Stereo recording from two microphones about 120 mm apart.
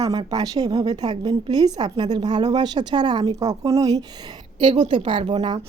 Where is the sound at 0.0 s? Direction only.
35° right (ahead or behind).